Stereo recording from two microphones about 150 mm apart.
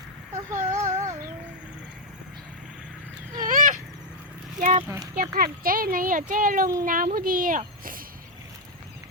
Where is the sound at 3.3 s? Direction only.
60° right (ahead or behind).